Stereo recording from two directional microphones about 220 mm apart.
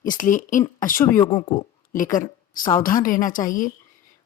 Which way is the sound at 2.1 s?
35° left (ahead or behind).